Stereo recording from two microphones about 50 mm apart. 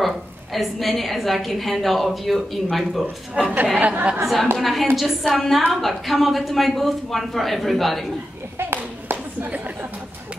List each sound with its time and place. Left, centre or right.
0.0 s a woman's voice: centre
3.4 s speech: right
4.6 s a woman's voice: centre
8.5 s clapping: right